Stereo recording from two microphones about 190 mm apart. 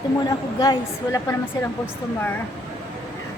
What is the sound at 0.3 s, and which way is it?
A woman's voice, 20° left (ahead or behind).